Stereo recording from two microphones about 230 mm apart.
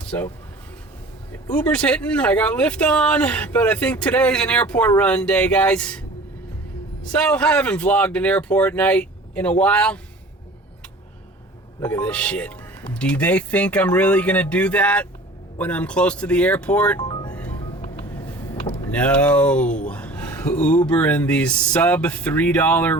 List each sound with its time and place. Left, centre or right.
0.0 s a sound: centre
1.5 s speech: centre
7.1 s speech: centre
11.8 s speech: centre
17.0 s music: centre
18.3 s a sound: centre
19.9 s speech: centre